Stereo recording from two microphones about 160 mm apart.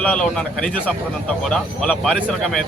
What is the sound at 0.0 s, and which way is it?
Speech, 5° left (ahead or behind).